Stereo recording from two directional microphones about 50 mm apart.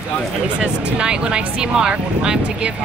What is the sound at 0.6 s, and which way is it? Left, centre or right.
Speech, right.